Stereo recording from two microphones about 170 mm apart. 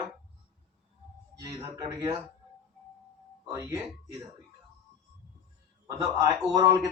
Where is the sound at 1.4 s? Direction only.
20° right (ahead or behind).